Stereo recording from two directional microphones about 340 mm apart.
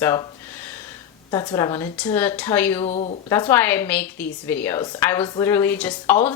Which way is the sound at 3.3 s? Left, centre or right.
Centre.